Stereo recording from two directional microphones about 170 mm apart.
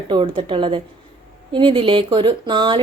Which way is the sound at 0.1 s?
30° right (ahead or behind).